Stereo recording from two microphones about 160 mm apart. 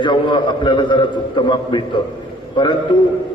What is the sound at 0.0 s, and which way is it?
A man's voice, 30° left (ahead or behind).